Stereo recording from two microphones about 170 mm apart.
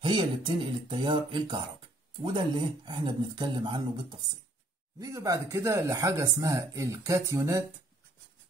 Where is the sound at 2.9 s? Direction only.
25° right (ahead or behind).